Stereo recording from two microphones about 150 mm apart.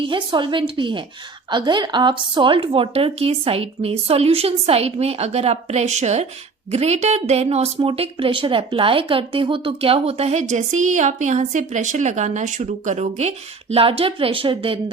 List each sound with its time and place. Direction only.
0.0 s a woman's voice: 35° right (ahead or behind)